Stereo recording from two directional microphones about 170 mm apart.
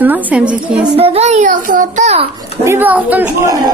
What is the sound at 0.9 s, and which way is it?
A child's voice, 35° right (ahead or behind).